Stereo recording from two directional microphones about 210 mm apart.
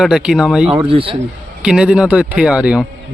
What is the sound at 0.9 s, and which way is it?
Speech, 25° right (ahead or behind).